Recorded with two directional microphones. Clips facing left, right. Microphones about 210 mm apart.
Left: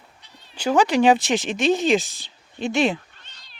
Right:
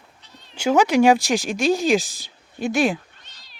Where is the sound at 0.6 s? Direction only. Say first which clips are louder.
Right 2 dB; 10° right (ahead or behind).